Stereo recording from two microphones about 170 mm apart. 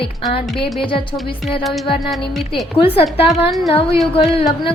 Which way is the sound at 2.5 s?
30° left (ahead or behind).